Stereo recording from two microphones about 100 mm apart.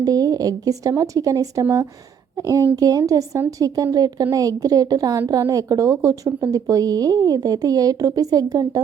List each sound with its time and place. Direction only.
0.0 s a woman's voice: 40° right (ahead or behind)
2.7 s a woman's voice: 40° right (ahead or behind)